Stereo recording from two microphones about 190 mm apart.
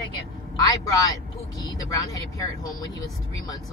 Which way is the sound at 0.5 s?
20° left (ahead or behind).